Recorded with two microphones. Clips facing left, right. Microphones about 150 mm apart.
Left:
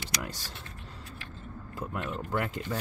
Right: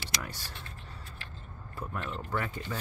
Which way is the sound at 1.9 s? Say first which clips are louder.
Left 3 dB; 10° left (ahead or behind).